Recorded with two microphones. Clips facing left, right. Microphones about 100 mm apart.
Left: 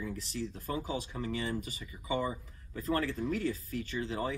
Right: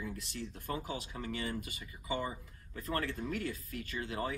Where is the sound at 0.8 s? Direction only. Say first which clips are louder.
Left 4 dB; 30° left (ahead or behind).